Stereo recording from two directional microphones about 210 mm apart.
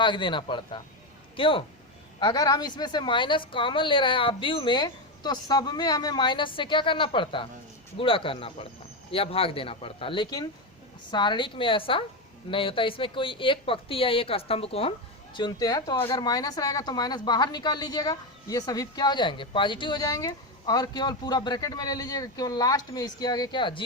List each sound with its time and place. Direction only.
0.0 s speech: 20° left (ahead or behind)